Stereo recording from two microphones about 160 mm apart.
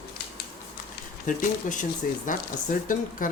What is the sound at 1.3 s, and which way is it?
Speech, 55° left (ahead or behind).